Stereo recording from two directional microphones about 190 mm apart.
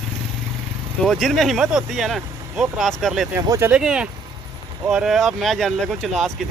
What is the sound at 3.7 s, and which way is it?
Speech, 5° right (ahead or behind).